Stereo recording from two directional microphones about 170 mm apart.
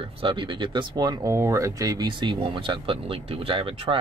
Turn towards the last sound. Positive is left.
turn(degrees=-35)  # may be behind; listen again after turning